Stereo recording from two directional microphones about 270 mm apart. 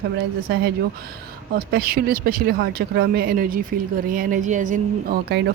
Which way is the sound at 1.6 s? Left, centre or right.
Right.